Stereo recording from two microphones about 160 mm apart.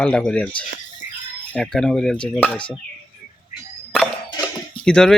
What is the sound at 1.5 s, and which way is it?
Speech, 5° left (ahead or behind).